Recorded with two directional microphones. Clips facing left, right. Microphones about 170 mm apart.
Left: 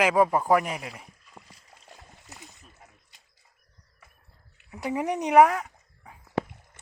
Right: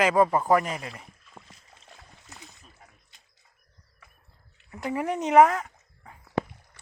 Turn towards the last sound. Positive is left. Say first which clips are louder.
# even
turn(degrees=10)  # may be behind; listen again after turning